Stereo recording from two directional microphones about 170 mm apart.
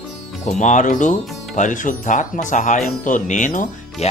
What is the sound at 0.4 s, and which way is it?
Speech, 45° left (ahead or behind).